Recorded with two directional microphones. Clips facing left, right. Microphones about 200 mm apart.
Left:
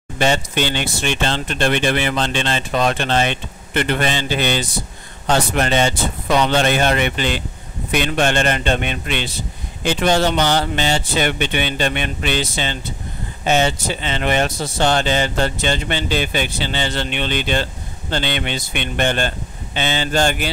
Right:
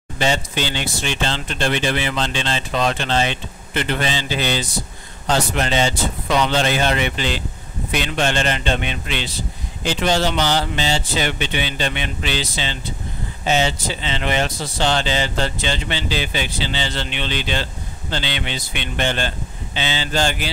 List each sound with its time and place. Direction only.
0.2 s speech: 55° left (ahead or behind)